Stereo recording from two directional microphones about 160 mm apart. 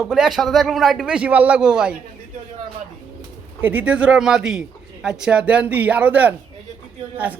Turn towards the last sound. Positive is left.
turn(degrees=-10)  # may be behind; listen again after turning